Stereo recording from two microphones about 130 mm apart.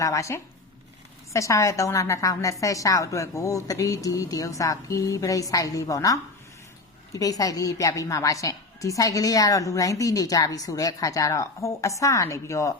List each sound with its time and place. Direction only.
0.0 s a woman's voice: 25° left (ahead or behind)